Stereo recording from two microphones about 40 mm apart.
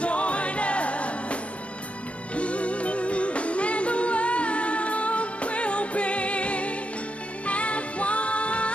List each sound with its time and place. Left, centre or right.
0.0 s music: left